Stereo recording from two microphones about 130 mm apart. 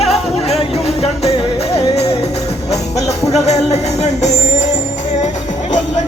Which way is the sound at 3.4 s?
55° left (ahead or behind).